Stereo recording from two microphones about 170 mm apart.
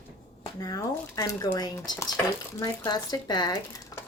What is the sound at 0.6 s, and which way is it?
Speech, 20° left (ahead or behind).